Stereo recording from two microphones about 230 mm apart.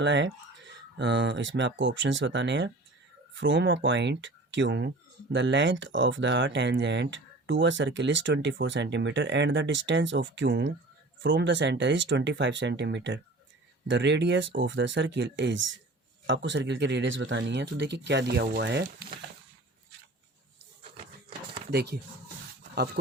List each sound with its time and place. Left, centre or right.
0.0 s speech: right
20.9 s a sound: right
21.7 s speech: right